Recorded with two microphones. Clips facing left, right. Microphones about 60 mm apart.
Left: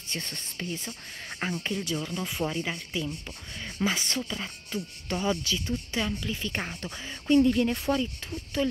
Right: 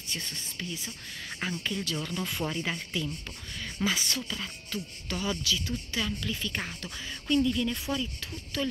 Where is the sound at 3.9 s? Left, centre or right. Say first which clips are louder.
Left 1 dB; left.